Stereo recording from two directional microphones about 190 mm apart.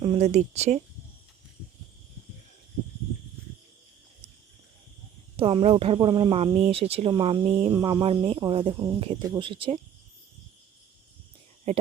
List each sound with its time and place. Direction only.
0.0 s speech: 35° right (ahead or behind)
5.4 s speech: 30° right (ahead or behind)